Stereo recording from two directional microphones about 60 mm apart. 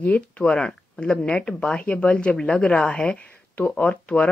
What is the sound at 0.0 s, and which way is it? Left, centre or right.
Speech, left.